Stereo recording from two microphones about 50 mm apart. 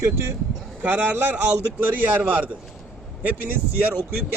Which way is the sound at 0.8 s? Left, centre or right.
Right.